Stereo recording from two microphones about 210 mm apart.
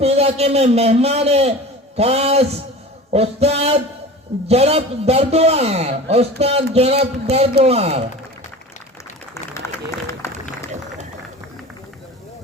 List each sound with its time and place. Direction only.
0.0 s a man's voice: 30° right (ahead or behind)